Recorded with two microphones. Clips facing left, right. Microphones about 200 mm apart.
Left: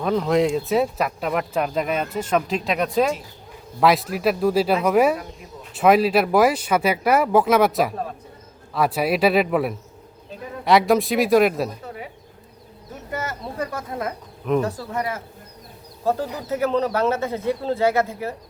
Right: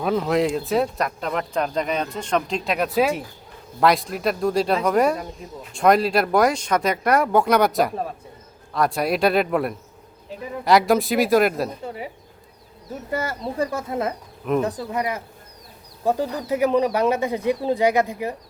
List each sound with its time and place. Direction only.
0.0 s speech: 5° right (ahead or behind)
13.1 s speech: 30° right (ahead or behind)